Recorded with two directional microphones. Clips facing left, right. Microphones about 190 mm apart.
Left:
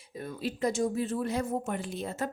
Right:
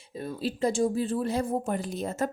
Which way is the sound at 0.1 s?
30° right (ahead or behind).